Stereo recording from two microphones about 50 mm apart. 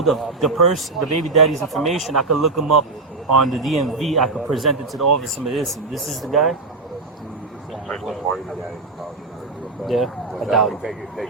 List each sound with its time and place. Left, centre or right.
0.0 s speech: centre
9.8 s speech: centre